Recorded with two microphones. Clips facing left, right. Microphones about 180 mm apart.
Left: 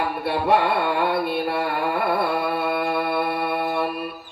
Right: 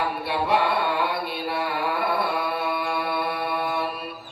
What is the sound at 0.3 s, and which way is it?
Mantra, 50° left (ahead or behind).